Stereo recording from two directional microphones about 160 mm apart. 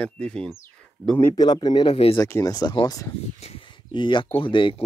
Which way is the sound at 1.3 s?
25° left (ahead or behind).